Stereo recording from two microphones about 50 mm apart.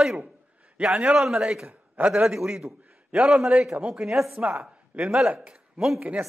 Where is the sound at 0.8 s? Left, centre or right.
Right.